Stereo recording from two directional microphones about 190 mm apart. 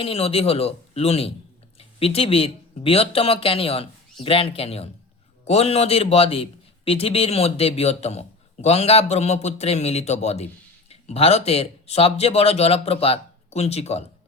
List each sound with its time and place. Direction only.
0.0 s a man's voice: 30° left (ahead or behind)